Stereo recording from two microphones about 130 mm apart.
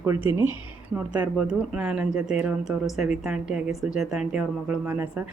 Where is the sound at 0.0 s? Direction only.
20° right (ahead or behind).